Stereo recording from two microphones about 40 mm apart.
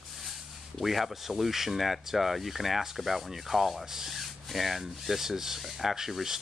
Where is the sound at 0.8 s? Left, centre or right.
Centre.